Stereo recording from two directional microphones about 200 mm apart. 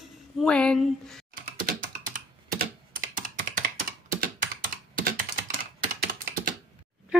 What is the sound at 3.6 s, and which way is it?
Computer keyboard, 45° right (ahead or behind).